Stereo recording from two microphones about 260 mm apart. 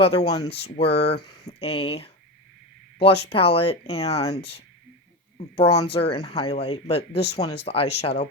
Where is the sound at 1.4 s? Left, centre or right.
Left.